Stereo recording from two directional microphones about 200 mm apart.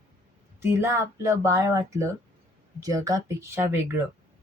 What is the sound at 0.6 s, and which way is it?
Speech, 15° right (ahead or behind).